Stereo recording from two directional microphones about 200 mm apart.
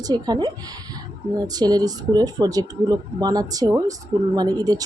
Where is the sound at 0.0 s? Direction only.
20° right (ahead or behind).